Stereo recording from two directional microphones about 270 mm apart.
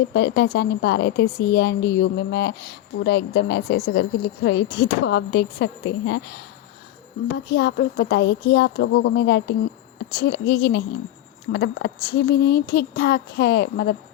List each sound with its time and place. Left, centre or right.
0.1 s a woman's voice: left